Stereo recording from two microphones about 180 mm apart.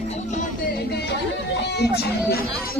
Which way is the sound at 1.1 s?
65° left (ahead or behind).